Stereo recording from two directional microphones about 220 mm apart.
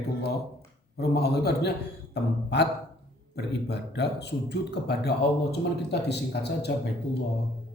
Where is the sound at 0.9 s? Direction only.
45° left (ahead or behind).